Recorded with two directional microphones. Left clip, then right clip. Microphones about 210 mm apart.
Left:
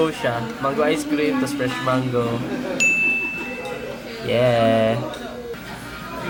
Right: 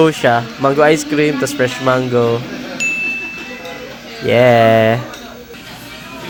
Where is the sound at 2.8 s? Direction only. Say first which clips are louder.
Even; centre (ahead or behind).